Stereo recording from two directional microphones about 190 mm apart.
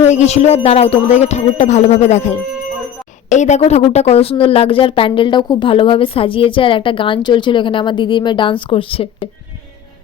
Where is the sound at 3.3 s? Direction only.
40° left (ahead or behind).